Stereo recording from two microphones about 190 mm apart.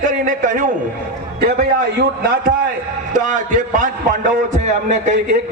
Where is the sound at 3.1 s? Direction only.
40° right (ahead or behind).